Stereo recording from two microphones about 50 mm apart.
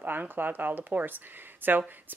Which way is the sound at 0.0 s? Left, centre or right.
Right.